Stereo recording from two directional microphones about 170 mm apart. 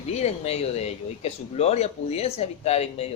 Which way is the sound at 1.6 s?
40° left (ahead or behind).